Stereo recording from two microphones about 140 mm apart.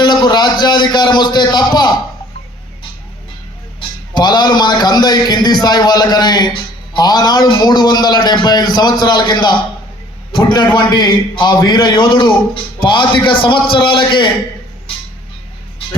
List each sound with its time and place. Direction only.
0.0 s a man's voice: 30° left (ahead or behind)
3.8 s a man's voice: 30° left (ahead or behind)